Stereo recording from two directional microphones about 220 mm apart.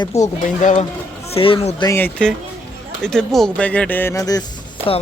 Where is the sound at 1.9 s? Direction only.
10° left (ahead or behind).